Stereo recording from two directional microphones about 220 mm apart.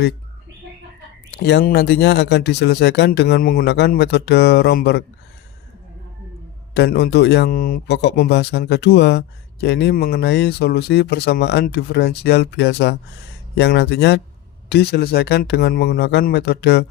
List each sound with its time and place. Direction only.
1.3 s a man's voice: 50° left (ahead or behind)
6.7 s a man's voice: 50° left (ahead or behind)